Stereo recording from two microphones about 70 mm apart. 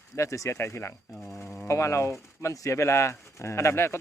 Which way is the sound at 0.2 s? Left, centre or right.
Left.